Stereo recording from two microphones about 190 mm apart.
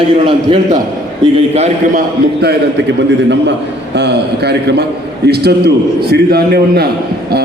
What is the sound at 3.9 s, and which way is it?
A man's voice, 60° right (ahead or behind).